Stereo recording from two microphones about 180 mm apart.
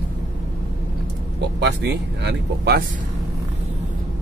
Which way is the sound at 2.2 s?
65° right (ahead or behind).